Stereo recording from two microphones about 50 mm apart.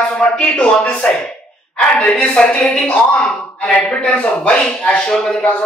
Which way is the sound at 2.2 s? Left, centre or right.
Centre.